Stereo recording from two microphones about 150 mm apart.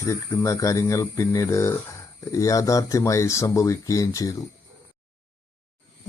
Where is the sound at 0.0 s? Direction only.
20° left (ahead or behind).